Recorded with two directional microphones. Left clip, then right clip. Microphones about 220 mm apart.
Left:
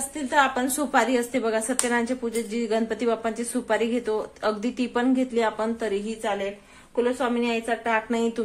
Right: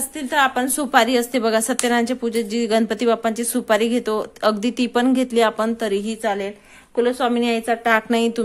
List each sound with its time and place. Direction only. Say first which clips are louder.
0.3 s a woman's voice: right 3 dB; 35° right (ahead or behind)